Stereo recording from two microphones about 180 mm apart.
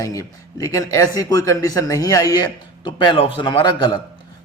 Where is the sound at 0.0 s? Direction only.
15° left (ahead or behind).